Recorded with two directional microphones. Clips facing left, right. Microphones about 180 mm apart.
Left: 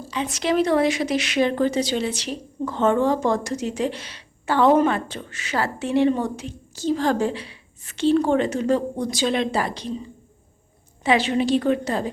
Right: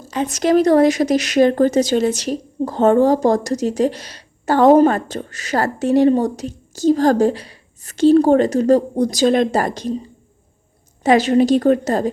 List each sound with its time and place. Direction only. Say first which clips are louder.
0.1 s a woman's voice: right 7 dB; 45° right (ahead or behind)
11.0 s a woman's voice: right 7 dB; 40° right (ahead or behind)